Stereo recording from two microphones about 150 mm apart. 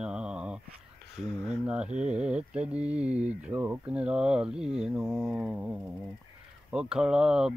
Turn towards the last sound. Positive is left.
turn(degrees=-5)  # may be behind; listen again after turning